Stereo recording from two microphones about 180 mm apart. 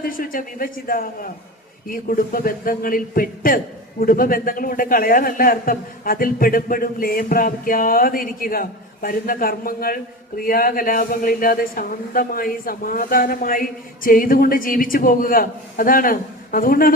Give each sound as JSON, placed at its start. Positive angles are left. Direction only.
{"t": 0.0, "sound": "a man's voice", "side_deg": 50}